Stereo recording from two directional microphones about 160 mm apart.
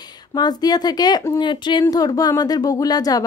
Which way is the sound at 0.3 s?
25° left (ahead or behind).